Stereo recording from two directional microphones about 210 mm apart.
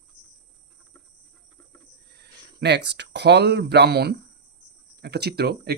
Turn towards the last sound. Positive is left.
turn(degrees=-50)  # may be behind; listen again after turning